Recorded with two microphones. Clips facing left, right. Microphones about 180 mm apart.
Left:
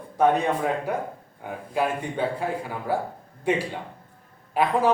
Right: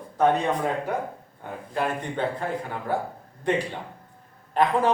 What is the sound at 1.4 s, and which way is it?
Speech, 10° left (ahead or behind).